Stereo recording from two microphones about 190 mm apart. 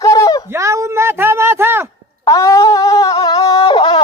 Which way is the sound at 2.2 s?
20° left (ahead or behind).